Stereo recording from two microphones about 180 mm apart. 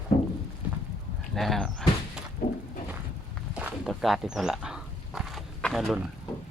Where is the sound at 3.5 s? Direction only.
5° right (ahead or behind).